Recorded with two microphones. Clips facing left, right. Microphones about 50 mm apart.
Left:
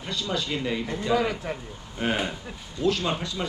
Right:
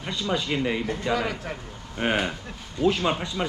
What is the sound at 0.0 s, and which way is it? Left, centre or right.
Speech, right.